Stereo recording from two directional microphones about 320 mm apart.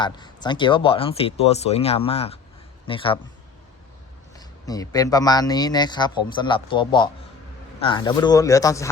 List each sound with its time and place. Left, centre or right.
0.0 s speech: centre
4.4 s speech: centre